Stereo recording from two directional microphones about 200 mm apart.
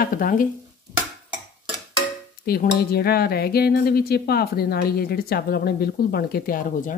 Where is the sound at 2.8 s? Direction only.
50° left (ahead or behind).